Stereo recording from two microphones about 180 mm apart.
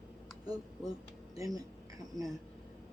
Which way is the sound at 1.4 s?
20° right (ahead or behind).